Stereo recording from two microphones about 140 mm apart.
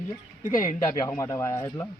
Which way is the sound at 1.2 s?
20° left (ahead or behind).